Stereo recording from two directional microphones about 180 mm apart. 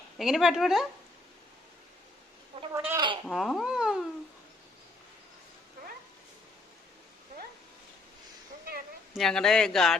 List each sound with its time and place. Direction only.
0.2 s speech: centre (ahead or behind)
2.7 s speech: 15° right (ahead or behind)
3.2 s speech: centre (ahead or behind)
9.1 s speech: 5° left (ahead or behind)